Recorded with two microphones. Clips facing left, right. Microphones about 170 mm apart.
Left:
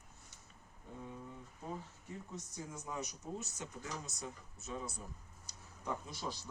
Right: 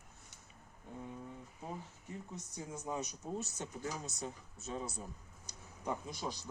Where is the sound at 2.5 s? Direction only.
25° right (ahead or behind).